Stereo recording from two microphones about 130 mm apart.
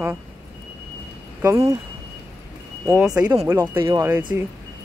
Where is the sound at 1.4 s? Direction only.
20° right (ahead or behind).